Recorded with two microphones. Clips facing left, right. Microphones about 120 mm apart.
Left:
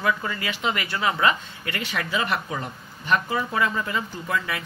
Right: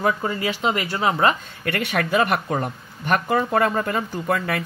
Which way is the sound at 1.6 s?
60° right (ahead or behind).